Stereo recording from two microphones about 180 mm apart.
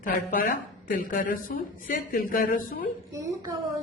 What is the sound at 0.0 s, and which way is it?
Speech, 50° left (ahead or behind).